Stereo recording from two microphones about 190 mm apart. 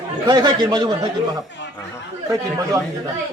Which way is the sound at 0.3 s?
20° right (ahead or behind).